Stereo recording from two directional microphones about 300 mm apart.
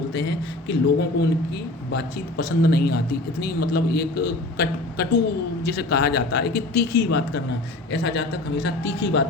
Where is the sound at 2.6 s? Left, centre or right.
Left.